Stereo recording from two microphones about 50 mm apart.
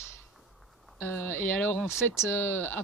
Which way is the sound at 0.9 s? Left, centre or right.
Left.